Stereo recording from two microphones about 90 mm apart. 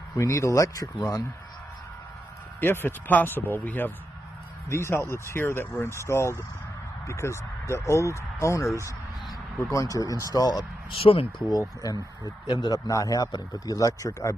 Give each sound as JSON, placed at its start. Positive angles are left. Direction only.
{"t": 0.2, "sound": "a man's voice", "side_deg": 35}
{"t": 2.6, "sound": "a man's voice", "side_deg": 25}
{"t": 10.9, "sound": "speech", "side_deg": 90}
{"t": 11.5, "sound": "speech", "side_deg": 45}
{"t": 12.4, "sound": "a man's voice", "side_deg": 55}